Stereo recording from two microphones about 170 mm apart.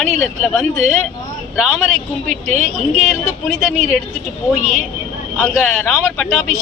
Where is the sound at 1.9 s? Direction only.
40° right (ahead or behind).